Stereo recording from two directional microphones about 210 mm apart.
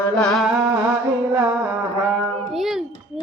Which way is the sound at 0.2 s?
Centre (ahead or behind).